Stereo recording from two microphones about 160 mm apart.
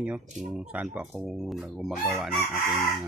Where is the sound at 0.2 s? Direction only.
50° right (ahead or behind).